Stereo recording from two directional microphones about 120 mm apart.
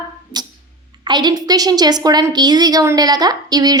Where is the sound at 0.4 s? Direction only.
35° right (ahead or behind).